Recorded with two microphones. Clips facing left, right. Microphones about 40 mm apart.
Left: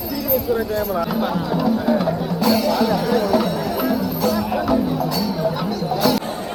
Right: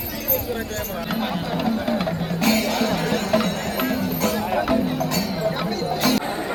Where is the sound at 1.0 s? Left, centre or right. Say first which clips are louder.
Left 4 dB; right.